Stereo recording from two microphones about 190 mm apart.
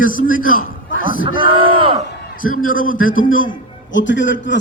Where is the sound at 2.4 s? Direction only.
90° left.